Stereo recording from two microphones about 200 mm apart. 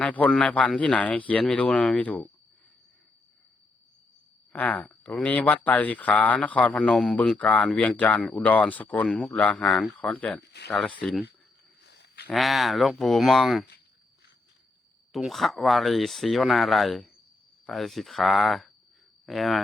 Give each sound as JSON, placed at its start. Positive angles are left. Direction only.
{"t": 0.0, "sound": "speech", "side_deg": 5}
{"t": 4.5, "sound": "speech", "side_deg": 10}
{"t": 10.4, "sound": "speech", "side_deg": 55}
{"t": 10.7, "sound": "speech", "side_deg": 0}
{"t": 11.8, "sound": "a sound", "side_deg": 55}
{"t": 12.3, "sound": "speech", "side_deg": 0}
{"t": 15.1, "sound": "speech", "side_deg": 0}